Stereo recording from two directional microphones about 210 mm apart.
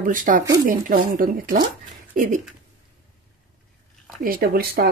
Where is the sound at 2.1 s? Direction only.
40° right (ahead or behind).